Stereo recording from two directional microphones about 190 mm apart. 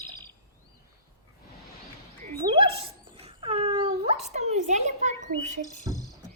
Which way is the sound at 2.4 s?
30° right (ahead or behind).